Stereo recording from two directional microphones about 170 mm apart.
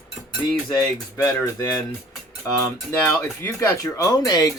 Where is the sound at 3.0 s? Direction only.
15° left (ahead or behind).